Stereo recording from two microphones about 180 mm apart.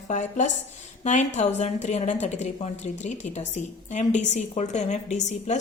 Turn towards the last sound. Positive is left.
turn(degrees=40)  # may be behind; listen again after turning